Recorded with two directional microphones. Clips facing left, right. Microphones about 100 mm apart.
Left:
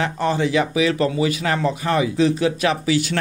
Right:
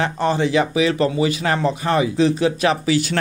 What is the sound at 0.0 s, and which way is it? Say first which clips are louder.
Speech: right 1 dB; 30° right (ahead or behind).